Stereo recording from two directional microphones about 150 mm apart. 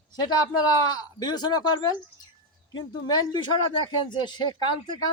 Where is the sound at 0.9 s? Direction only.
30° left (ahead or behind).